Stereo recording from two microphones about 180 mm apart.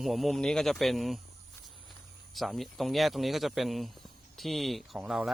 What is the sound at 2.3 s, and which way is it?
Speech, centre (ahead or behind).